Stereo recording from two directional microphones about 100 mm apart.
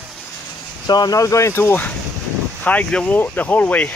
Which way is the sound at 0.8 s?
40° left (ahead or behind).